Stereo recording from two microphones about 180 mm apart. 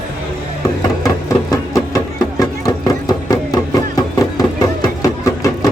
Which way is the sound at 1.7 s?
20° left (ahead or behind).